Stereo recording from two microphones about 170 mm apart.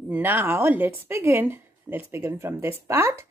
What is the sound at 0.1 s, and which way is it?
A woman's voice, 10° right (ahead or behind).